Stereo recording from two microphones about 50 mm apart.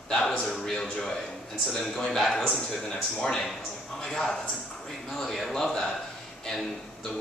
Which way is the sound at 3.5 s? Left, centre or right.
Centre.